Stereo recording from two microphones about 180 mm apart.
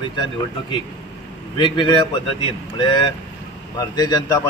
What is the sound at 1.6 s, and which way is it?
Speech, 25° left (ahead or behind).